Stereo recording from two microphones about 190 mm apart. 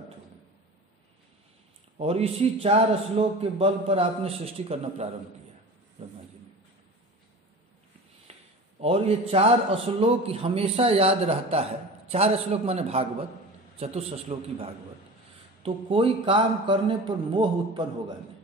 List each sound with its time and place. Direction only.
2.0 s a man's voice: 30° right (ahead or behind)
8.3 s a man's voice: 30° right (ahead or behind)